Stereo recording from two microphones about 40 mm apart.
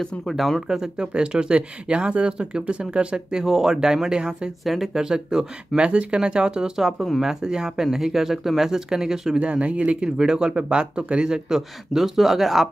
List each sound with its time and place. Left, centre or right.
0.3 s speech: centre
0.6 s speech: centre
3.4 s speech: centre
5.8 s speech: right
6.8 s speech: centre
9.4 s speech: right; by 12.6 s centre